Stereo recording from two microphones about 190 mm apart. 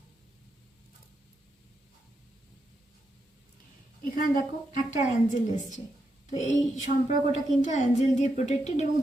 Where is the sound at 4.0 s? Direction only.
45° left (ahead or behind).